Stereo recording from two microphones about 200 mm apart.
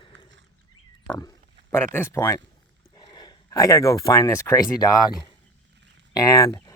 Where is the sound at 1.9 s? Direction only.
10° left (ahead or behind).